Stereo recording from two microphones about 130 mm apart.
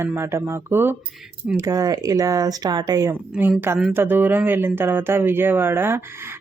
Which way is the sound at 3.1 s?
15° right (ahead or behind).